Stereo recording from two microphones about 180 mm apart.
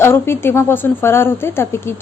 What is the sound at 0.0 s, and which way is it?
A woman's voice, 15° left (ahead or behind).